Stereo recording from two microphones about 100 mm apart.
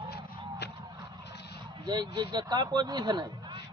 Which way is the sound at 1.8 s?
45° right (ahead or behind).